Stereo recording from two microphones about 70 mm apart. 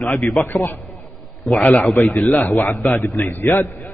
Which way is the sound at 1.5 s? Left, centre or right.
Centre.